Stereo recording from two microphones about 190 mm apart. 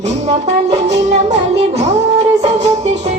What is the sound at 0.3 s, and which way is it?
Music, 35° right (ahead or behind).